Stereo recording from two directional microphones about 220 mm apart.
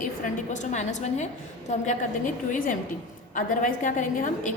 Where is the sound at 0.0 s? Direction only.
35° left (ahead or behind).